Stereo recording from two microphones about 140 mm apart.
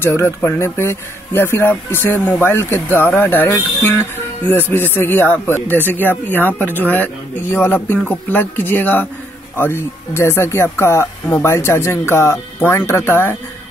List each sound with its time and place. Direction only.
0.0 s speech: 15° left (ahead or behind)